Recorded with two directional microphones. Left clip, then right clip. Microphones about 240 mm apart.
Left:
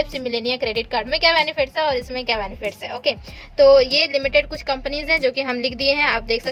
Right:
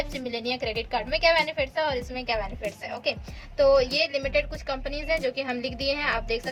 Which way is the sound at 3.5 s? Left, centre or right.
Left.